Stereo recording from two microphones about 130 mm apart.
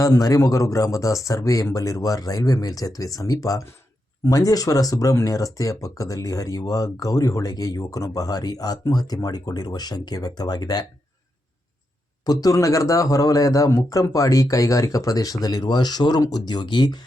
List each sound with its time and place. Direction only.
0.0 s speech: 25° left (ahead or behind)
12.2 s speech: 30° left (ahead or behind)